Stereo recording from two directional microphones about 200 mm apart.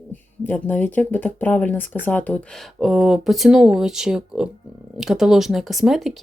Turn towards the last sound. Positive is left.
turn(degrees=0)  # may be behind; listen again after turning